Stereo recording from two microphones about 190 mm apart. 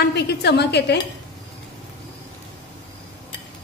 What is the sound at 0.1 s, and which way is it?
Speech, 60° left (ahead or behind).